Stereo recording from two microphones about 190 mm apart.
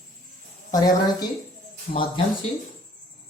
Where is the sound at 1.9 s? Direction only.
45° left (ahead or behind).